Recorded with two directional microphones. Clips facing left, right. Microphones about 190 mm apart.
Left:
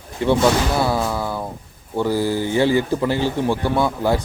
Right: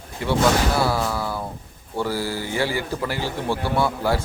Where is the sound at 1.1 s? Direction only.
20° left (ahead or behind).